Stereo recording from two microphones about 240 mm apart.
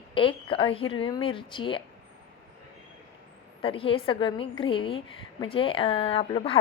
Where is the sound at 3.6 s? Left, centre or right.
Left.